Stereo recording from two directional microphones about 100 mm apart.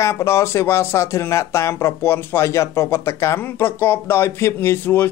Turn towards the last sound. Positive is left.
turn(degrees=25)  # may be behind; listen again after turning